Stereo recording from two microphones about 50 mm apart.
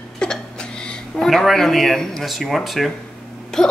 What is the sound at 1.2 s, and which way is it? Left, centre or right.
A woman's voice, centre.